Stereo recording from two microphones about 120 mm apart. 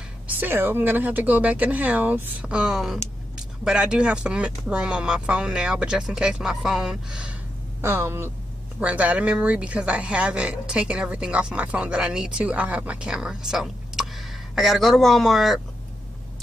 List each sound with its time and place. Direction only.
0.4 s speech: 20° right (ahead or behind)
7.8 s speech: 20° right (ahead or behind); by 15.6 s centre (ahead or behind)